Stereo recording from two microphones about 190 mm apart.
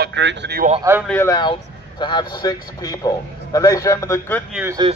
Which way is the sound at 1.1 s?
15° left (ahead or behind).